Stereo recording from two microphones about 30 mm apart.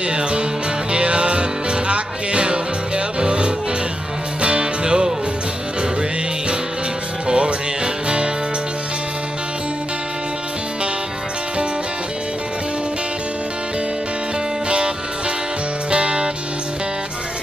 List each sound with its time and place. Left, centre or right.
0.1 s music: right
7.2 s music: right
15.9 s music: right